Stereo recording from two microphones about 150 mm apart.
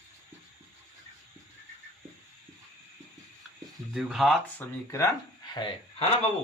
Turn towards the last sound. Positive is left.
turn(degrees=35)  # may be behind; listen again after turning